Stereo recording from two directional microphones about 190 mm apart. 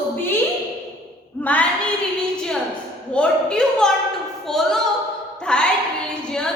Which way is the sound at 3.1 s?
5° left (ahead or behind).